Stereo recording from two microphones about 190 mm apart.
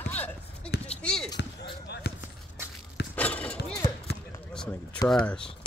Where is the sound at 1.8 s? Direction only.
60° left (ahead or behind).